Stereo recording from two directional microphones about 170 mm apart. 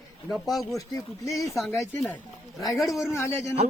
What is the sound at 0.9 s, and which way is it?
Speech, 20° left (ahead or behind).